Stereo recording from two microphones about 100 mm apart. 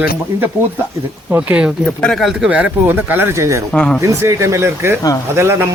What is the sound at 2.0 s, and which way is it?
Speech, 5° left (ahead or behind).